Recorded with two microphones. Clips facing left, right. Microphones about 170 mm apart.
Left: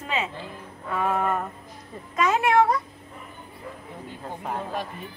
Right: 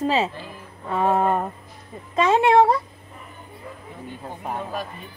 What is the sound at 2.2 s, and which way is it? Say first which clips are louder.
Speech: right 4 dB; 30° right (ahead or behind).